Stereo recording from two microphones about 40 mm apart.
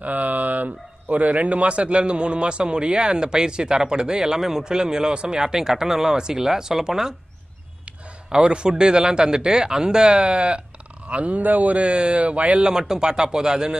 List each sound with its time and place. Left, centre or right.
0.0 s speech: right; by 7.2 s centre
8.3 s a man's voice: right
12.6 s speech: centre